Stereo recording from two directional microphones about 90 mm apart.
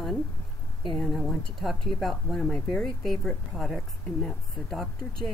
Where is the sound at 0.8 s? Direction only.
5° left (ahead or behind).